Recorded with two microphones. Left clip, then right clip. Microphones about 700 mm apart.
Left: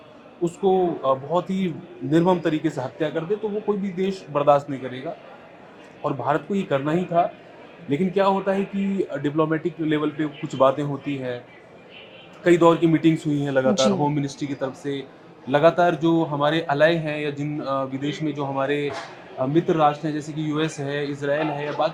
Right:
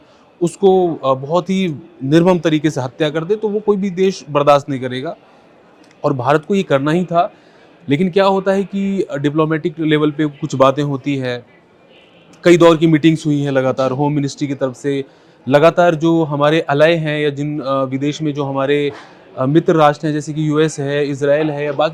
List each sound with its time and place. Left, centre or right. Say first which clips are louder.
0.4 s speech: right 8 dB; right
6.0 s speech: right 9 dB; right
12.5 s speech: right 7 dB; right